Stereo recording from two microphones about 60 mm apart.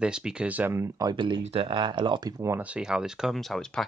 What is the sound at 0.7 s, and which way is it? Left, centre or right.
Speech, right.